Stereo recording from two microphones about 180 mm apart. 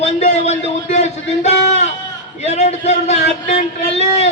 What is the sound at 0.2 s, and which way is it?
Speech, 40° left (ahead or behind).